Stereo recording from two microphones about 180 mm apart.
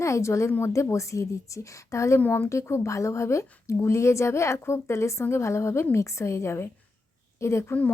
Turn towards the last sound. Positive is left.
turn(degrees=10)  # may be behind; listen again after turning